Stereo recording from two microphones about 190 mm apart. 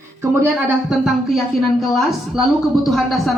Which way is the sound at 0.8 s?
Centre (ahead or behind).